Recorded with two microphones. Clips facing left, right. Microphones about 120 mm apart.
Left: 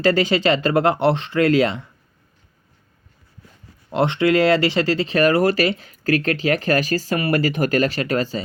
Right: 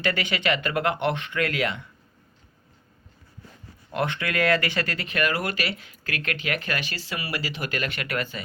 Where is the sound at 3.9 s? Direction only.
25° left (ahead or behind).